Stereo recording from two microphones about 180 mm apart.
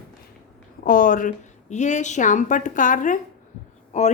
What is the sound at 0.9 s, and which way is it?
Speech, 50° left (ahead or behind).